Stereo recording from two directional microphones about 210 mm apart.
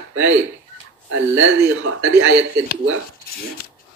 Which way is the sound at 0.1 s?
65° right (ahead or behind).